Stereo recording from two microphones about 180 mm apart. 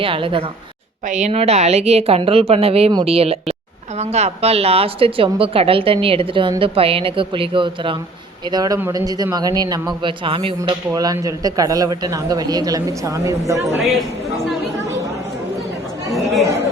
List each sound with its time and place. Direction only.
0.0 s speech: 30° right (ahead or behind)
1.0 s a woman's voice: 40° right (ahead or behind); by 13.7 s 15° right (ahead or behind)
16.1 s chatter: centre (ahead or behind)